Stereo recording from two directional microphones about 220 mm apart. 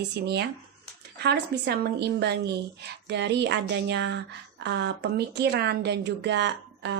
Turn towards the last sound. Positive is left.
turn(degrees=-50)  # may be behind; listen again after turning